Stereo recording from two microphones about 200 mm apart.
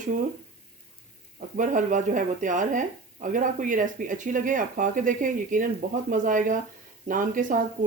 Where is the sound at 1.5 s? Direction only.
40° right (ahead or behind).